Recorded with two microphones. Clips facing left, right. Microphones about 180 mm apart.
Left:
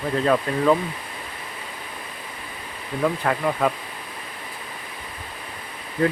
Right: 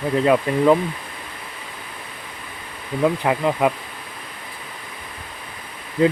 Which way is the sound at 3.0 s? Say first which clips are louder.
Right 3 dB; 15° right (ahead or behind).